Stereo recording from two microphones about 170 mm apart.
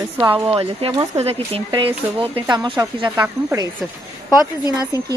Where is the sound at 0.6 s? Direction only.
30° right (ahead or behind).